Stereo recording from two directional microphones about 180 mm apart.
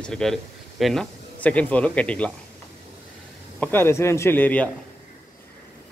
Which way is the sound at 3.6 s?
10° left (ahead or behind).